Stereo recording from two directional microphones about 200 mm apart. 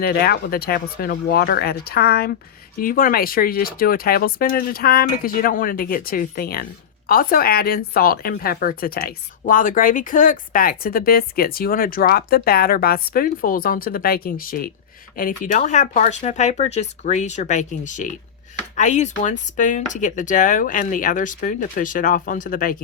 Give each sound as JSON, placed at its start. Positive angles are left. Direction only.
{"t": 0.0, "sound": "speech", "side_deg": 50}